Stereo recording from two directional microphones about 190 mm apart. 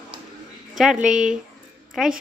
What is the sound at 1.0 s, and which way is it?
A woman's voice, 5° right (ahead or behind).